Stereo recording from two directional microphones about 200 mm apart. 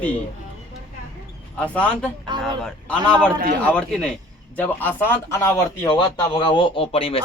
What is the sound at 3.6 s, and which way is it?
Speech, 5° left (ahead or behind).